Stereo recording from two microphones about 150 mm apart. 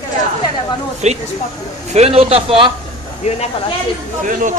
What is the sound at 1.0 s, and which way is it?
Speech, 50° right (ahead or behind).